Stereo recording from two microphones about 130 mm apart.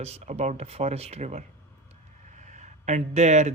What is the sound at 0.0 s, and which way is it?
Speech, 55° right (ahead or behind).